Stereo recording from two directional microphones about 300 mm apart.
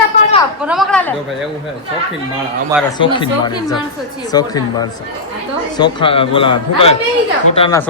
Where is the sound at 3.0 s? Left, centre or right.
Centre.